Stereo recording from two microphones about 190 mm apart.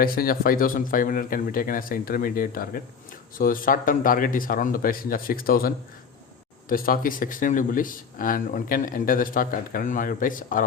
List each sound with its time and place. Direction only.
0.0 s speech: 50° left (ahead or behind)